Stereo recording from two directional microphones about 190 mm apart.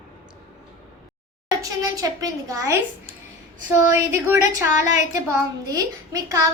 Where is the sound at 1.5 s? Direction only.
20° right (ahead or behind).